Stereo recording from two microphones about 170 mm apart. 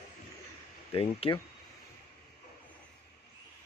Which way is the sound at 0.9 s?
35° left (ahead or behind).